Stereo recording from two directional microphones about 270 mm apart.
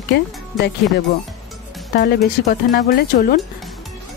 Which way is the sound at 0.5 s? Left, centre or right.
Centre.